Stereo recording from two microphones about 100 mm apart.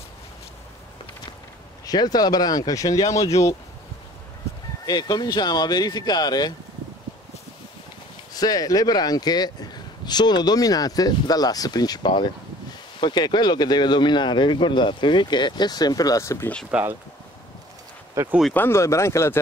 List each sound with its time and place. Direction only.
1.9 s speech: 40° left (ahead or behind)
4.8 s speech: 45° left (ahead or behind)
8.3 s speech: 40° left (ahead or behind)
16.7 s speech: 10° right (ahead or behind)
18.2 s speech: 30° right (ahead or behind)
18.5 s speech: 20° left (ahead or behind)